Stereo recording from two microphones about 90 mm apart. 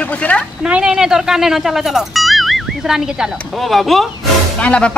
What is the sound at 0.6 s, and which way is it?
Speech, 10° right (ahead or behind).